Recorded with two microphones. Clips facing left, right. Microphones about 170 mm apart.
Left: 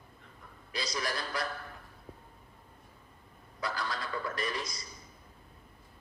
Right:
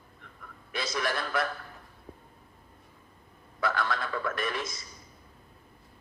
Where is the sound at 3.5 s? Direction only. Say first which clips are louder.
Right 6 dB; 65° right (ahead or behind).